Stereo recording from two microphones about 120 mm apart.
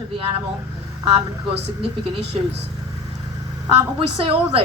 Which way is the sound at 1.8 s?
50° right (ahead or behind).